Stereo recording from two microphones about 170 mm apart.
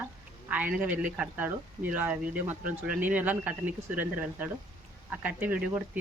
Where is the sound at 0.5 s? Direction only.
10° right (ahead or behind).